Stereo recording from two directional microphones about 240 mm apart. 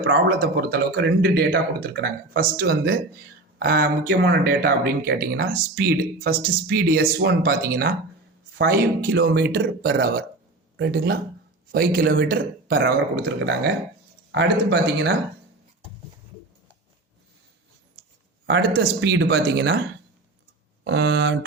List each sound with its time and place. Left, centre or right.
0.0 s speech: right
18.0 s a sound: centre
18.4 s speech: right
20.8 s speech: right